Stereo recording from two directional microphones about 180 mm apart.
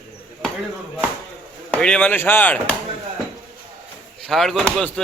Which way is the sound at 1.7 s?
5° left (ahead or behind).